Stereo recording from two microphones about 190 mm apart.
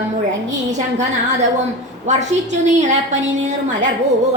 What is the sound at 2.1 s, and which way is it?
A woman's voice, 40° right (ahead or behind).